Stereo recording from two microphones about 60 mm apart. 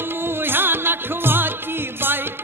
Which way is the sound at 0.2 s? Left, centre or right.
Right.